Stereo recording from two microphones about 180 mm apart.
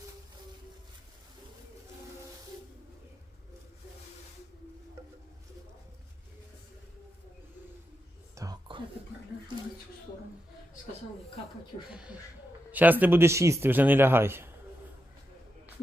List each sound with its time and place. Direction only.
8.4 s whispering: 25° right (ahead or behind)
11.9 s a man's voice: 5° right (ahead or behind)